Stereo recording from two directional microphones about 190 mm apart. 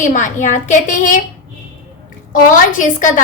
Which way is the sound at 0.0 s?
40° left (ahead or behind).